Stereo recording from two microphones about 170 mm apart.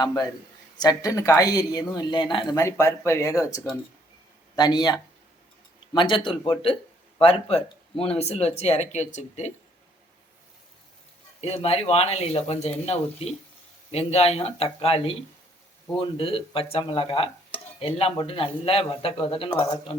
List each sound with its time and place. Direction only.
0.0 s speech: 20° left (ahead or behind)
2.6 s a man's voice: 15° left (ahead or behind); by 9.5 s 40° left (ahead or behind)
11.3 s a man's voice: 35° left (ahead or behind)